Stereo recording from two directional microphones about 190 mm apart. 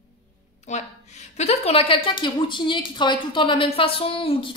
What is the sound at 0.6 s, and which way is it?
A woman's voice, 40° left (ahead or behind).